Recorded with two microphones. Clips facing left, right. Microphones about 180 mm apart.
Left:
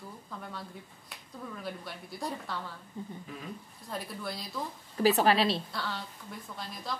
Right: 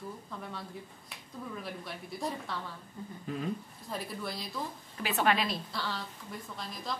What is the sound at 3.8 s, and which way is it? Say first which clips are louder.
Speech: even; centre (ahead or behind).